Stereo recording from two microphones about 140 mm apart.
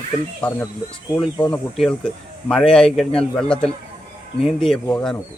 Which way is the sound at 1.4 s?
5° left (ahead or behind).